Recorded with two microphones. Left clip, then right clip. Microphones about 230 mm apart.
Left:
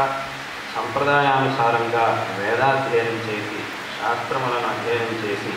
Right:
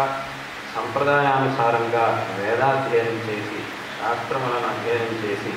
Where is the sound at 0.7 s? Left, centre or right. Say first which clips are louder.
Left 1 dB; centre.